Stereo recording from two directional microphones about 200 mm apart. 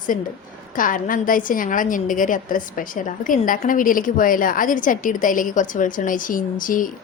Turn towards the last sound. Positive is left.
turn(degrees=40)  # may be behind; listen again after turning